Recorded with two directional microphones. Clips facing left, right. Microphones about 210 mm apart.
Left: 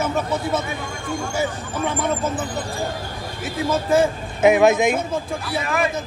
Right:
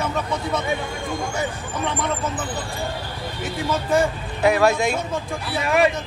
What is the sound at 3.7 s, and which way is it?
Speech, centre (ahead or behind).